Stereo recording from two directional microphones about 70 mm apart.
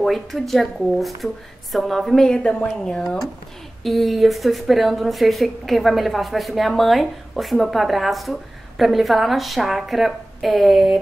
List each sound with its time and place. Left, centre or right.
0.0 s speech: centre
3.8 s speech: centre